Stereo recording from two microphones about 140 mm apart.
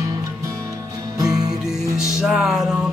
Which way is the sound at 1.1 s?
25° right (ahead or behind).